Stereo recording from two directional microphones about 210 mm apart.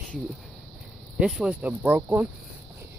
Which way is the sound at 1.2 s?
Centre (ahead or behind).